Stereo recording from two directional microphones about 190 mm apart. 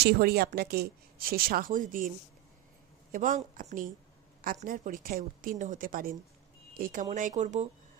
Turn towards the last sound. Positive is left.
turn(degrees=-40)  # may be behind; listen again after turning